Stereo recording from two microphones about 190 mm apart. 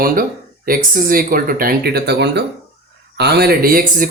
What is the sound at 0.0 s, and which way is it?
Speech, 50° right (ahead or behind).